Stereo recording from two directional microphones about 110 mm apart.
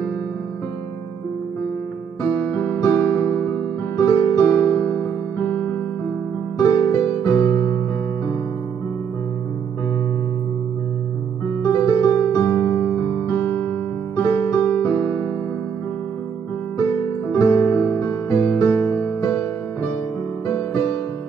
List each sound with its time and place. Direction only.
2.4 s music: 20° left (ahead or behind)
6.6 s music: 20° left (ahead or behind)
11.6 s music: 25° left (ahead or behind)
14.1 s music: 20° left (ahead or behind)
17.3 s music: 25° left (ahead or behind)